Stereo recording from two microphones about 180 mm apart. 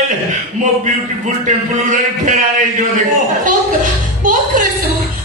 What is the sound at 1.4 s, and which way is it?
Speech, 45° right (ahead or behind).